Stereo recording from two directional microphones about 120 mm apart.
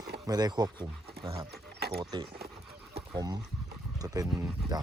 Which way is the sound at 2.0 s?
35° right (ahead or behind).